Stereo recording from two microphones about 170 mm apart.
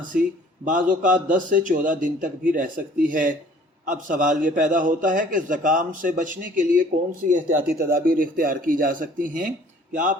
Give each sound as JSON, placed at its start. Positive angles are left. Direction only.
{"t": 0.1, "sound": "a man's voice", "side_deg": -60}